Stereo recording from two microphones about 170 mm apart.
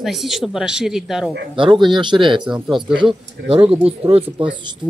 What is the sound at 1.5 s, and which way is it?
Speech, 30° right (ahead or behind).